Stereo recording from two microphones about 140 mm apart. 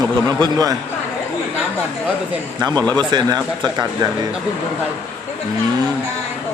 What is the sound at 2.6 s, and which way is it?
A man's voice, 30° right (ahead or behind).